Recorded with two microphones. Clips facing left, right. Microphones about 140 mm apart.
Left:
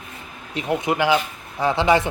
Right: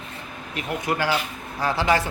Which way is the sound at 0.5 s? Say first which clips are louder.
Left 4 dB; 25° left (ahead or behind).